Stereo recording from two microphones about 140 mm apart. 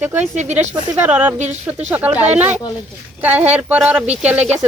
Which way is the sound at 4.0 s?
50° right (ahead or behind).